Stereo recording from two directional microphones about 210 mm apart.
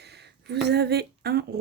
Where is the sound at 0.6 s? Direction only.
50° right (ahead or behind).